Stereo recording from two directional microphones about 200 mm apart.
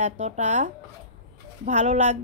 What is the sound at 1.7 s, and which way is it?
Speech, 35° right (ahead or behind).